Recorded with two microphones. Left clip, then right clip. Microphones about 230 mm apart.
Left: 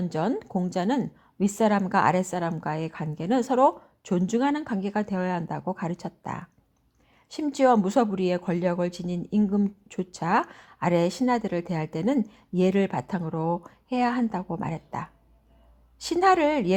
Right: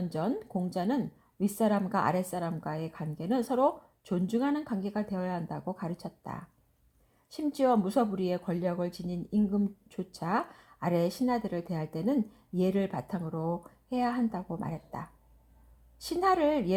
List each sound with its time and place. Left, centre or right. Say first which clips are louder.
0.1 s speech: left 6 dB; left